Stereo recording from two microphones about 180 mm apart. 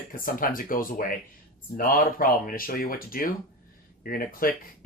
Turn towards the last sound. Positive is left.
turn(degrees=55)  # may be behind; listen again after turning